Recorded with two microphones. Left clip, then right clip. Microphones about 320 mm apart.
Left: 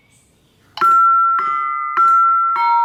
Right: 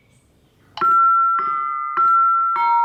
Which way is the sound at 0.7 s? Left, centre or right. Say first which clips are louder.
Left 3 dB; centre.